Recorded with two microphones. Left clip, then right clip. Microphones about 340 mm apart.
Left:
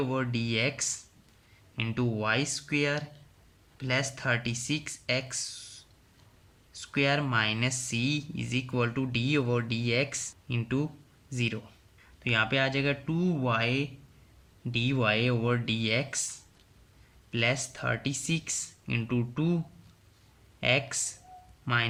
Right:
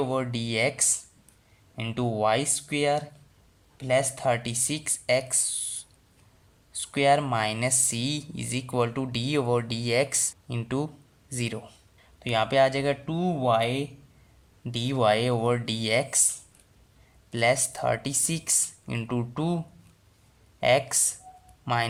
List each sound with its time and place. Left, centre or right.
0.0 s speech: centre
17.3 s speech: centre
20.6 s speech: centre